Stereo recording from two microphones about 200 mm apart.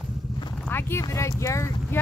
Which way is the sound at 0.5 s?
10° left (ahead or behind).